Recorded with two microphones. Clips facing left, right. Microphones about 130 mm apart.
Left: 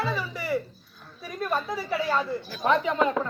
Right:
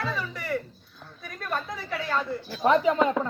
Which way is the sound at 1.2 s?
10° left (ahead or behind).